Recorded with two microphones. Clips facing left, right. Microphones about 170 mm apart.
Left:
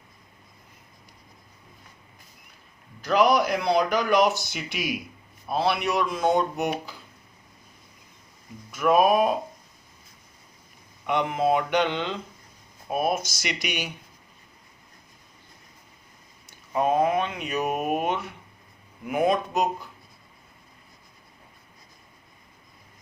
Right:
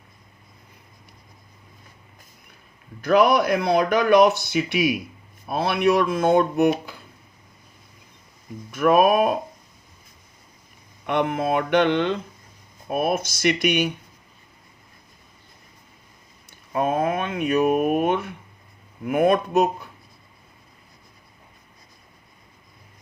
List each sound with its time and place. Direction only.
3.0 s speech: 55° right (ahead or behind)
8.7 s speech: 60° right (ahead or behind)
11.1 s speech: 55° right (ahead or behind)
16.5 s speech: 55° right (ahead or behind)